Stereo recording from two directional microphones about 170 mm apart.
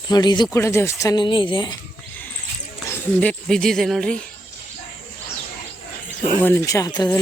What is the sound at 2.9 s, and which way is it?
Speech, 10° left (ahead or behind).